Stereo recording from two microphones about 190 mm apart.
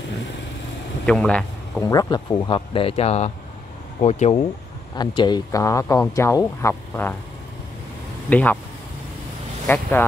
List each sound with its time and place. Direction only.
1.0 s speech: 5° left (ahead or behind)
1.9 s speech: 20° left (ahead or behind)
4.9 s a man's voice: 25° left (ahead or behind)
8.3 s a man's voice: 5° left (ahead or behind)
9.7 s a man's voice: 10° left (ahead or behind)